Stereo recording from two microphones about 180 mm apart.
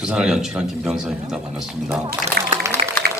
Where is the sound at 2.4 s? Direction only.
60° right (ahead or behind).